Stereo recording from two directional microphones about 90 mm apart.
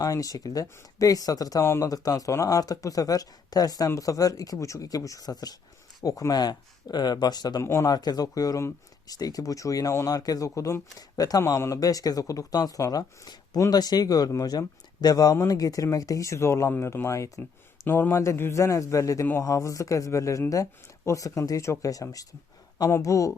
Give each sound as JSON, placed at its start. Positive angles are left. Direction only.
{"t": 0.0, "sound": "speech", "side_deg": 40}
{"t": 1.6, "sound": "speech", "side_deg": 30}
{"t": 1.9, "sound": "speech", "side_deg": 40}
{"t": 7.6, "sound": "speech", "side_deg": 30}
{"t": 7.9, "sound": "speech", "side_deg": 45}
{"t": 17.8, "sound": "speech", "side_deg": 25}